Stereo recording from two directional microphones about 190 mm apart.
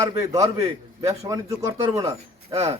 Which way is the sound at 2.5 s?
30° right (ahead or behind).